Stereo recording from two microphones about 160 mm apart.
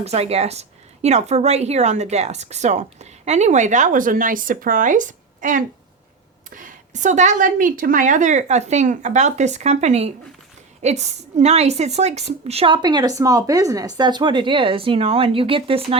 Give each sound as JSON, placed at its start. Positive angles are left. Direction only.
{"t": 0.0, "sound": "a woman's voice", "side_deg": -40}